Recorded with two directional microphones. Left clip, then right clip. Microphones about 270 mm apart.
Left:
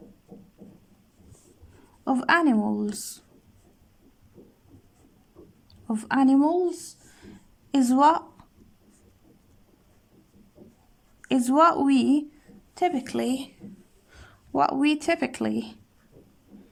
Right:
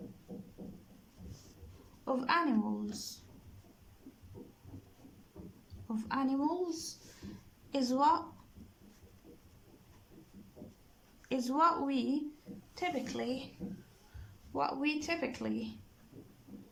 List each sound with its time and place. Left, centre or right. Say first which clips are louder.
2.0 s speech: left 10 dB; left
5.9 s speech: left 13 dB; left
11.3 s speech: left 10 dB; left
14.5 s speech: left 12 dB; left